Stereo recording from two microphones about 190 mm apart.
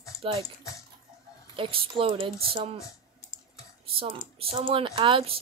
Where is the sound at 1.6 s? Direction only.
30° right (ahead or behind).